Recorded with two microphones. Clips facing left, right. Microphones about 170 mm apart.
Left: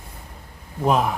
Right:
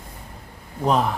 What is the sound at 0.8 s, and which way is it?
Speech, 5° left (ahead or behind).